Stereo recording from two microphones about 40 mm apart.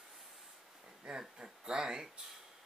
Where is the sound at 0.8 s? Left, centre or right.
Right.